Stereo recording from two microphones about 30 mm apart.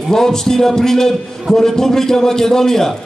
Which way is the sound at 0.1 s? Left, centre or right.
Centre.